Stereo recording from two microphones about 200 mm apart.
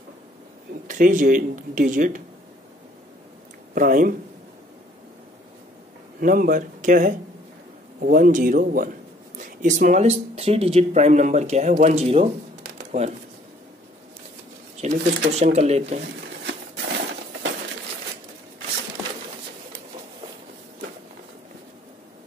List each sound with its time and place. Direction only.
0.8 s speech: 40° right (ahead or behind)
3.7 s speech: 45° right (ahead or behind)
6.2 s speech: 45° right (ahead or behind)
12.7 s a sound: 35° right (ahead or behind)
14.8 s speech: 35° right (ahead or behind)
16.4 s a sound: 55° right (ahead or behind)